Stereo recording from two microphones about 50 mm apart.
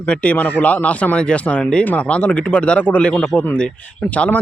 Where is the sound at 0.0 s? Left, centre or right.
Left.